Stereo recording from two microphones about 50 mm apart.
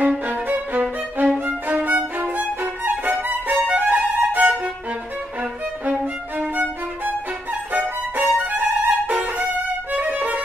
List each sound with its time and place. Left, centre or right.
0.3 s music: right
1.4 s violin: right
3.8 s music: right
7.7 s music: right
9.9 s violin: right